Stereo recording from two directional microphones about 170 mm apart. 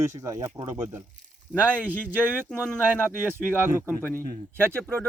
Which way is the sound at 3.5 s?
10° right (ahead or behind).